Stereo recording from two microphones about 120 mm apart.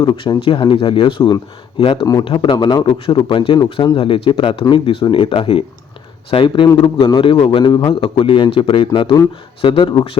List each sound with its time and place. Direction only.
0.0 s a man's voice: 40° left (ahead or behind)